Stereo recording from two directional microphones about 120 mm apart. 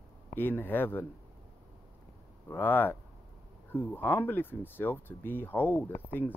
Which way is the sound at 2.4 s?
15° left (ahead or behind).